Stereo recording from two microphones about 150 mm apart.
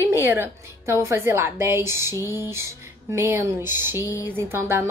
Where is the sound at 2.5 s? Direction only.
15° right (ahead or behind).